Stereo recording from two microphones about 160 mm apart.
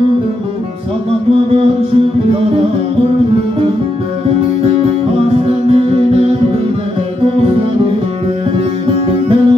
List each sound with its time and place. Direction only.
5.3 s music: 40° right (ahead or behind)
8.8 s music: 35° right (ahead or behind)